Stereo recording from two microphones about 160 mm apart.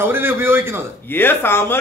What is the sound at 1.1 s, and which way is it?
Speech, 15° left (ahead or behind).